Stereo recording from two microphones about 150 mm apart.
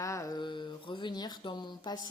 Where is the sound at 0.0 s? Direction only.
20° left (ahead or behind).